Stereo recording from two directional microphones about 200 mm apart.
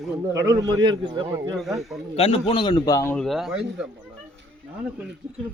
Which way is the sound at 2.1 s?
30° left (ahead or behind).